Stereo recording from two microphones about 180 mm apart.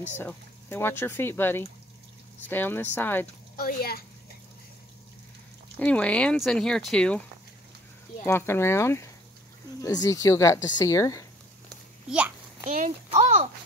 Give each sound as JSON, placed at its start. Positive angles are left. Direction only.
{"t": 0.2, "sound": "speech", "side_deg": 10}
{"t": 3.5, "sound": "speech", "side_deg": 55}
{"t": 5.8, "sound": "speech", "side_deg": 5}
{"t": 8.3, "sound": "speech", "side_deg": 15}
{"t": 12.6, "sound": "speech", "side_deg": -45}
{"t": 13.1, "sound": "a sound", "side_deg": -35}